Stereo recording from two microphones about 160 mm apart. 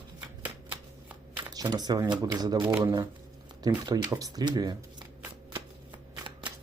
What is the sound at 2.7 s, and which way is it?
Speech, 10° right (ahead or behind).